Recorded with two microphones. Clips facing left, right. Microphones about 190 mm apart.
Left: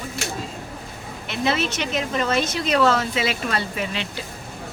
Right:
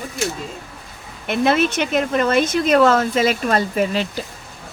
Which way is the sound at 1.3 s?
55° right (ahead or behind).